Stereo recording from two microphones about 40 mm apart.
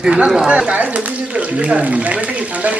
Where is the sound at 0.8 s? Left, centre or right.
Right.